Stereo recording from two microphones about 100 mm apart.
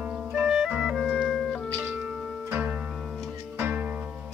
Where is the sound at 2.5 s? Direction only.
15° right (ahead or behind).